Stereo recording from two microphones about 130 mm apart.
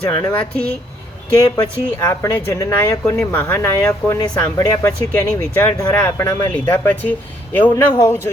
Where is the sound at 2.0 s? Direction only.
20° left (ahead or behind).